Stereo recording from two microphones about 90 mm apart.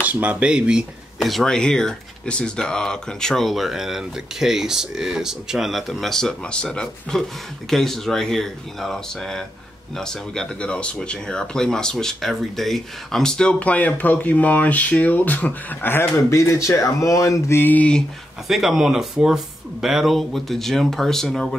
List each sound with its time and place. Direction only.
0.0 s speech: 15° right (ahead or behind); by 16.1 s 25° left (ahead or behind)
16.3 s speech: 35° left (ahead or behind)
17.6 s speech: 20° left (ahead or behind)
18.5 s speech: 5° right (ahead or behind)